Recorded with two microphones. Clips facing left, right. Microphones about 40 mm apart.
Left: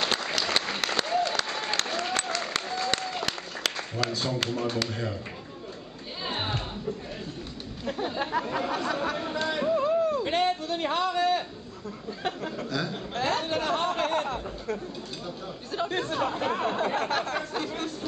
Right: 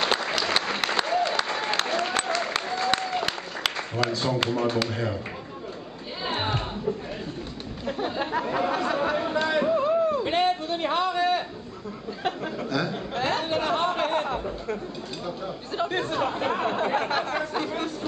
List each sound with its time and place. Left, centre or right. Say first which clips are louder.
0.0 s applause: right 3 dB; centre
4.3 s speech: right 4 dB; centre
6.2 s music: right 4 dB; centre
7.8 s chatter: right 2 dB; centre
10.8 s a sound: right 1 dB; centre
12.6 s speech: right 5 dB; centre
13.1 s chatter: right 1 dB; right
15.7 s speech: right 2 dB; right
16.1 s speech: right 2 dB; centre